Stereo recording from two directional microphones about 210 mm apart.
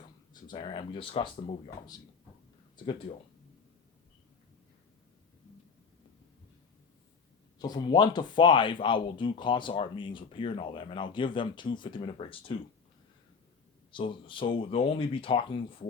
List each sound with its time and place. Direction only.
0.4 s speech: 20° left (ahead or behind)
7.6 s speech: 20° left (ahead or behind)
13.9 s speech: 25° left (ahead or behind)